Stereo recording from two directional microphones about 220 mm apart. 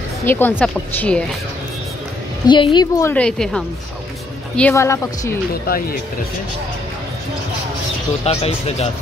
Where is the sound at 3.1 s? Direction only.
5° left (ahead or behind).